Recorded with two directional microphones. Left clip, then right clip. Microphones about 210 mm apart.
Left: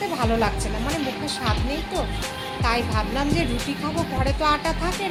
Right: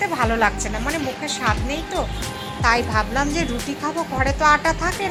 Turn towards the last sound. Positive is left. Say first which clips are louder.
# right 5 dB
turn(degrees=-10)  # may be behind; listen again after turning